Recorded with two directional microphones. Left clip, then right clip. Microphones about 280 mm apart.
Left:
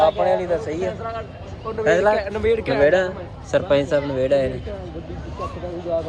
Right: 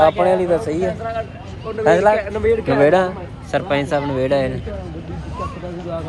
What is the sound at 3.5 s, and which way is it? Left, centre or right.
Speech, centre.